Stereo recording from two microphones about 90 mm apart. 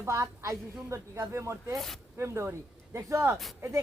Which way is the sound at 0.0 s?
35° right (ahead or behind).